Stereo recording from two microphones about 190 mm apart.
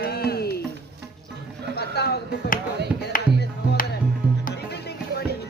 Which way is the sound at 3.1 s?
50° left (ahead or behind).